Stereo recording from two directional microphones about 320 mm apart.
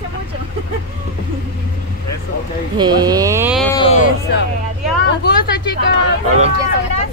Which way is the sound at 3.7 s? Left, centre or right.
Centre.